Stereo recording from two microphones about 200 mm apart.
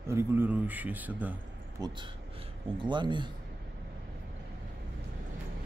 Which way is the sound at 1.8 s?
25° right (ahead or behind).